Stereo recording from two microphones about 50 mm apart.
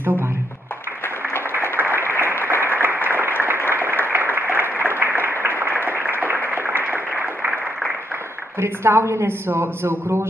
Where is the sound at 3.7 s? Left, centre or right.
Right.